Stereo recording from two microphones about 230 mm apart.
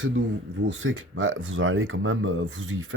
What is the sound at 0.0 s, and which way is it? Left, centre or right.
Speech, right.